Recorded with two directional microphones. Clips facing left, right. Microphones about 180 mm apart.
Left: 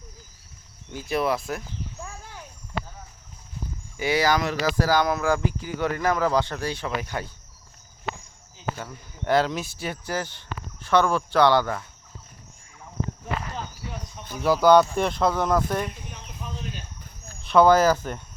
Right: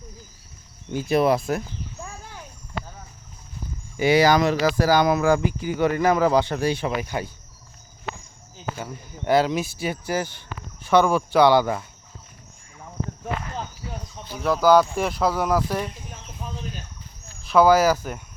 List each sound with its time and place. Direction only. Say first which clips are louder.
0.9 s speech: right 5 dB; 20° right (ahead or behind)
3.9 s speech: right 5 dB; 15° right (ahead or behind)
4.7 s speech: right 3 dB; 10° right (ahead or behind)
8.7 s speech: right 4 dB; 10° right (ahead or behind)
14.4 s speech: even; centre (ahead or behind)
16.4 s cricket: right 2 dB; 35° right (ahead or behind)
17.4 s speech: right 1 dB; 5° right (ahead or behind)